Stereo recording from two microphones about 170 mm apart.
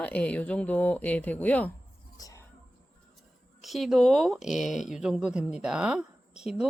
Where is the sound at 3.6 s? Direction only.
Centre (ahead or behind).